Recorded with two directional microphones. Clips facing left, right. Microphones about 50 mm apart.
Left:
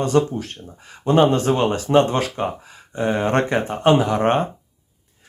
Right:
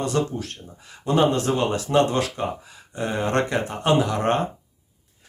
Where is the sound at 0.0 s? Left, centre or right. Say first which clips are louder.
Left 5 dB; left.